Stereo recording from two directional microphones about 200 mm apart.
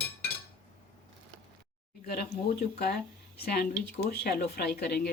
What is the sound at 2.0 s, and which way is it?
Speech, 50° left (ahead or behind).